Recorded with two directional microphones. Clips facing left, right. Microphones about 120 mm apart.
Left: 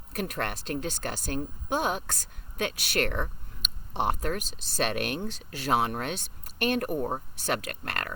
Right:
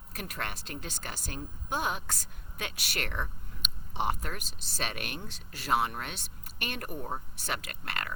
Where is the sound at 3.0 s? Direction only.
40° left (ahead or behind).